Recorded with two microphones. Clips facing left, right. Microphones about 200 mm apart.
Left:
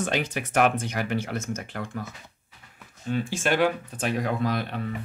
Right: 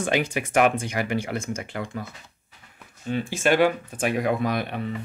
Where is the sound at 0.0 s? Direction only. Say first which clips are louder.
Right 3 dB; 10° right (ahead or behind).